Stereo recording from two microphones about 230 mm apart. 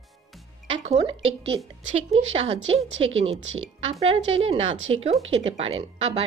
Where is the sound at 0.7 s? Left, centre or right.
Right.